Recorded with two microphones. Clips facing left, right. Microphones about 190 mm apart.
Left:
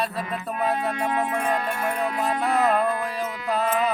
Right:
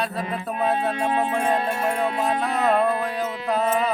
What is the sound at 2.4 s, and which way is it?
Music, centre (ahead or behind).